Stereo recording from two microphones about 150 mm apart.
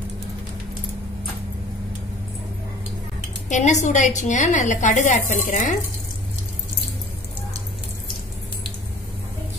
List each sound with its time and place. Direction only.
3.4 s a woman's voice: 55° left (ahead or behind)